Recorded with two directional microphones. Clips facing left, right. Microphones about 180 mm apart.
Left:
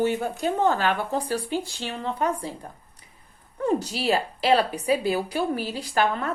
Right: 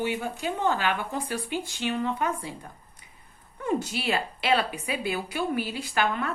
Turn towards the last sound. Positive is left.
turn(degrees=35)  # may be behind; listen again after turning